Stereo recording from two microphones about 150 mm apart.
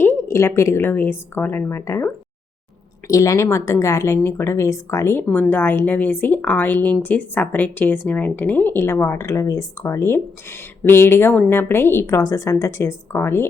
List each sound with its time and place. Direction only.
0.0 s speech: 15° left (ahead or behind)
3.1 s speech: 20° left (ahead or behind)